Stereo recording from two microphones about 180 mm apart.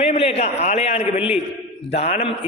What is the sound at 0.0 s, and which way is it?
A man's voice, 35° left (ahead or behind).